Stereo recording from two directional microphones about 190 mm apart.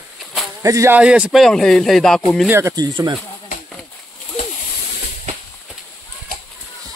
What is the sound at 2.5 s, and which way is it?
Speech, 15° right (ahead or behind).